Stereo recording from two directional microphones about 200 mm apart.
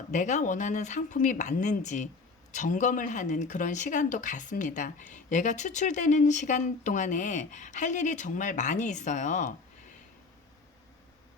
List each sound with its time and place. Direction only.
0.1 s speech: 35° left (ahead or behind)